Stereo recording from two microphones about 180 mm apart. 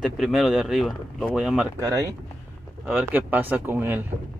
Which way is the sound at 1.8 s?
20° right (ahead or behind).